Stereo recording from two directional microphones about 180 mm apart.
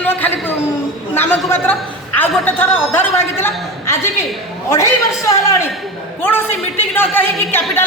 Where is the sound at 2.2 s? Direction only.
10° left (ahead or behind).